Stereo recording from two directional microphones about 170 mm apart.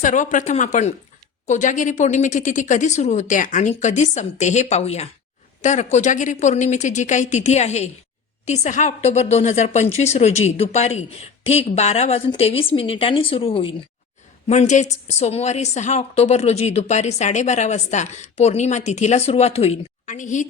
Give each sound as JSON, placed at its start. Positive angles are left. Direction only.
{"t": 0.0, "sound": "a woman's voice", "side_deg": 50}
{"t": 14.4, "sound": "a woman's voice", "side_deg": 40}